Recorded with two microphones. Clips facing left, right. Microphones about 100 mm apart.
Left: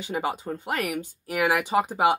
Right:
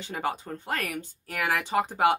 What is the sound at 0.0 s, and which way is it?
Speech, 10° left (ahead or behind).